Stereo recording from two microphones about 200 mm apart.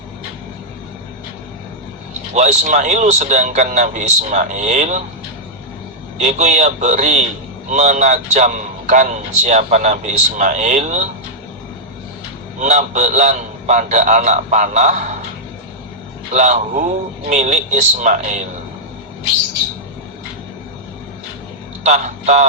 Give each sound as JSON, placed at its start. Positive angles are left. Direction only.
{"t": 2.3, "sound": "a man's voice", "side_deg": -35}
{"t": 6.1, "sound": "a man's voice", "side_deg": -35}
{"t": 12.5, "sound": "a man's voice", "side_deg": -35}
{"t": 16.3, "sound": "a man's voice", "side_deg": -35}
{"t": 21.8, "sound": "a man's voice", "side_deg": -35}